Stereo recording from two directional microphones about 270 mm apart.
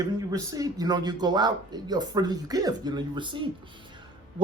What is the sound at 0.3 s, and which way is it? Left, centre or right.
Speech, centre.